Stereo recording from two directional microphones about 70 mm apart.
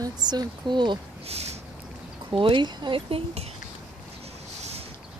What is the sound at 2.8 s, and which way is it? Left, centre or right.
Speech, right.